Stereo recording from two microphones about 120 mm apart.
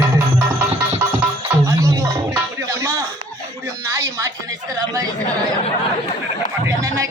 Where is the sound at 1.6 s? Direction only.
30° right (ahead or behind).